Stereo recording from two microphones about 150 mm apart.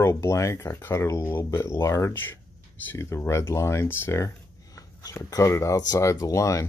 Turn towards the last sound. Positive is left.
turn(degrees=20)  # may be behind; listen again after turning